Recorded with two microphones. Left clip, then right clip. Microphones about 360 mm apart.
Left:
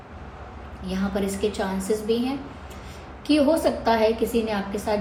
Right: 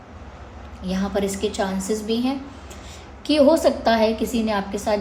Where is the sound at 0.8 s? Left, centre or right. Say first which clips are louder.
Right 3 dB; right.